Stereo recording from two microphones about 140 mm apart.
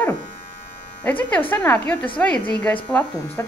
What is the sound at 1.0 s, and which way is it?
Speech, 10° left (ahead or behind).